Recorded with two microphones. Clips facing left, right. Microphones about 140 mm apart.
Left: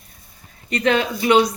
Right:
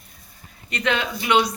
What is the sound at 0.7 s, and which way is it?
Speech, 40° left (ahead or behind).